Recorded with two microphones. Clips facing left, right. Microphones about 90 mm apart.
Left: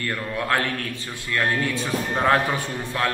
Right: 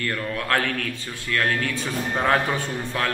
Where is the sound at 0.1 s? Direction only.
10° left (ahead or behind).